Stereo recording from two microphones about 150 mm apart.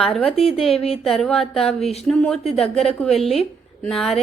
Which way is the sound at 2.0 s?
5° left (ahead or behind).